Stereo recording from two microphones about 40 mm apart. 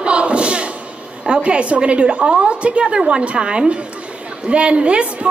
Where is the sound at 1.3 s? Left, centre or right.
Right.